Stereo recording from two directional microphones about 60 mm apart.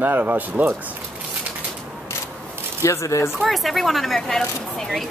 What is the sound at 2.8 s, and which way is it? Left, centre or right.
Speech, left.